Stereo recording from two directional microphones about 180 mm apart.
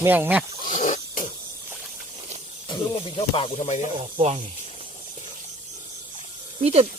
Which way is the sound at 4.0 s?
35° right (ahead or behind).